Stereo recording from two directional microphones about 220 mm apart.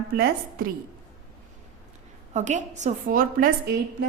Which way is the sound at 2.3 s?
35° right (ahead or behind).